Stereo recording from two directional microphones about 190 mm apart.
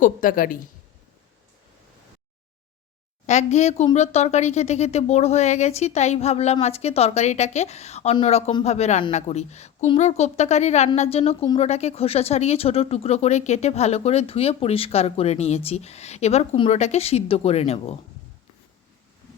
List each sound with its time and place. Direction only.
0.0 s a woman's voice: 45° left (ahead or behind)
3.2 s speech: 35° left (ahead or behind)